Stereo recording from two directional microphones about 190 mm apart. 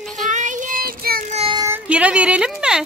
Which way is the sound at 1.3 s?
35° right (ahead or behind).